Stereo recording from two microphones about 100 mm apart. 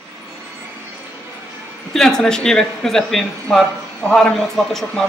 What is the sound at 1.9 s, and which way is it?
Speech, 5° left (ahead or behind).